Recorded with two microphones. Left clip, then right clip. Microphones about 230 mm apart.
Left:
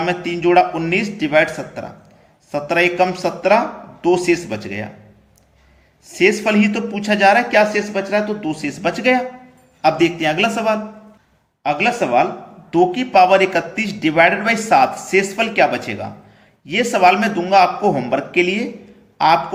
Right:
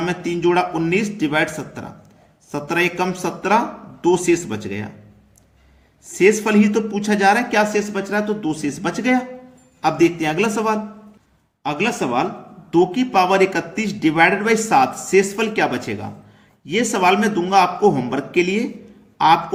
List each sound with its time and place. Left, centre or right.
0.0 s a man's voice: right
6.1 s a man's voice: right